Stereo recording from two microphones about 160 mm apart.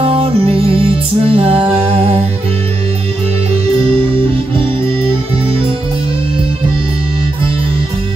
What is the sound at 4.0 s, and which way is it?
Music, 35° right (ahead or behind).